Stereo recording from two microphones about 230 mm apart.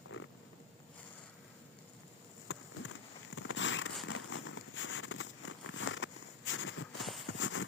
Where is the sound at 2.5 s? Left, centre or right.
Left.